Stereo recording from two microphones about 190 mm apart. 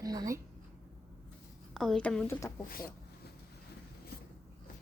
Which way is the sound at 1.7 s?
Centre (ahead or behind).